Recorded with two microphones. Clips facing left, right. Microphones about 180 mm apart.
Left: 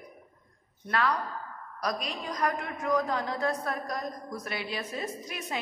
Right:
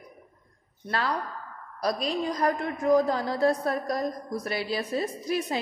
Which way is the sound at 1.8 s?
30° right (ahead or behind).